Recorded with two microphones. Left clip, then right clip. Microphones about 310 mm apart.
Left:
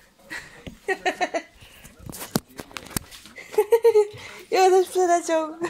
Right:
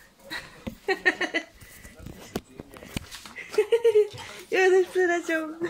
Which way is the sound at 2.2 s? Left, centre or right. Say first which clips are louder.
Left 7 dB; left.